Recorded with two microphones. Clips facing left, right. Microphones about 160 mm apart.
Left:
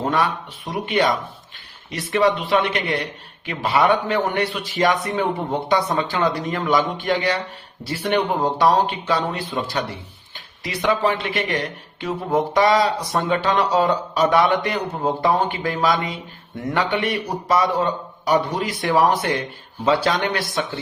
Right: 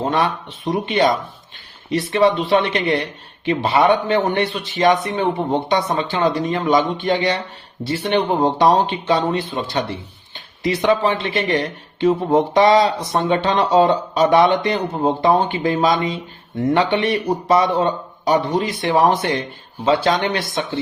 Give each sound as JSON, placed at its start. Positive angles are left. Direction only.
{"t": 0.0, "sound": "speech", "side_deg": -25}